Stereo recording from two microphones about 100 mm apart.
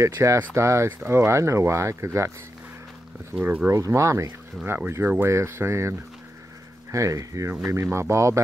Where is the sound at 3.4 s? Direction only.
20° right (ahead or behind).